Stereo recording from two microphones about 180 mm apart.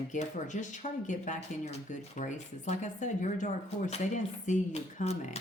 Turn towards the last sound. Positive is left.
turn(degrees=40)  # may be behind; listen again after turning